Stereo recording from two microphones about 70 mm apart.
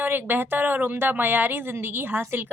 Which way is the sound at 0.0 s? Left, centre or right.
Right.